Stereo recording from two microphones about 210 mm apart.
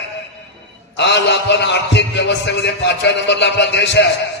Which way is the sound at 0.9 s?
55° left (ahead or behind).